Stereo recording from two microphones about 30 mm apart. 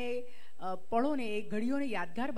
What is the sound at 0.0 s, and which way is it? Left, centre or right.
Speech, centre.